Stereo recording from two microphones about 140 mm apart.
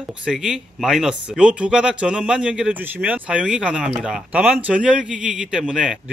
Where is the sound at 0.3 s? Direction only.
5° right (ahead or behind).